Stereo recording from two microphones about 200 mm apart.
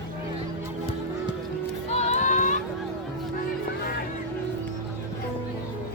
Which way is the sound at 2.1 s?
35° left (ahead or behind).